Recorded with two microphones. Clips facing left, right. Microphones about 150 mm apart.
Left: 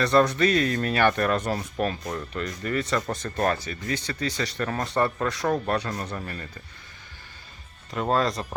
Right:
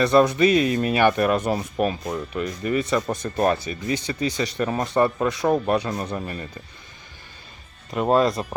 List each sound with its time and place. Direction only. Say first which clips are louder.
0.0 s speech: right 4 dB; 10° right (ahead or behind)
7.9 s speech: right 5 dB; 15° right (ahead or behind)